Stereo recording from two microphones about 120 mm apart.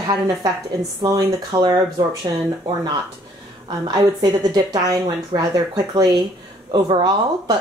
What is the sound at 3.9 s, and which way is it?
A woman's voice, 35° right (ahead or behind).